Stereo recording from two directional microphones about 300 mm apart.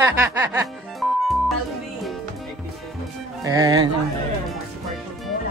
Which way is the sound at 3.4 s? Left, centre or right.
Centre.